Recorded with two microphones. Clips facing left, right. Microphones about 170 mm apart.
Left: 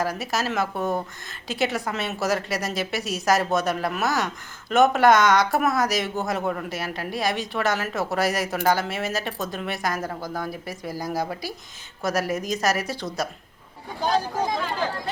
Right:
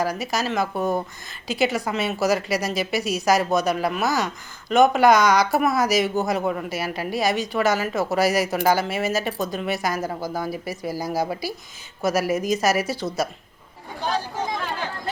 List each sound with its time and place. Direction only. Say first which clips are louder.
0.0 s speech: right 2 dB; centre (ahead or behind)